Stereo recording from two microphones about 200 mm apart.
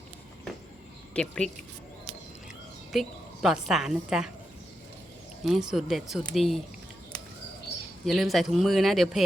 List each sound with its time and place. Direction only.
1.1 s speech: 5° left (ahead or behind)
2.9 s a woman's voice: centre (ahead or behind)
5.4 s speech: centre (ahead or behind)
8.0 s speech: centre (ahead or behind)